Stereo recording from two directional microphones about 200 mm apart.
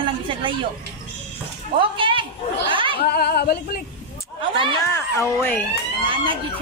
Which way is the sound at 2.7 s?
25° right (ahead or behind).